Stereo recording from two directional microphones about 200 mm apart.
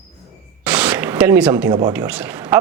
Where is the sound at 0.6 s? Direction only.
5° right (ahead or behind).